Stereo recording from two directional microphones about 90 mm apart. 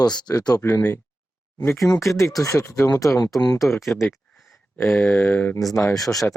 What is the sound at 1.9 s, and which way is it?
Speech, 35° left (ahead or behind).